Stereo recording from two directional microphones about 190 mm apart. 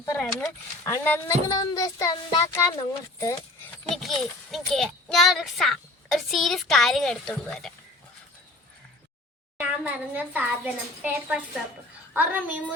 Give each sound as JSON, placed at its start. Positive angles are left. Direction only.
{"t": 0.0, "sound": "speech", "side_deg": 15}
{"t": 9.6, "sound": "a woman's voice", "side_deg": -10}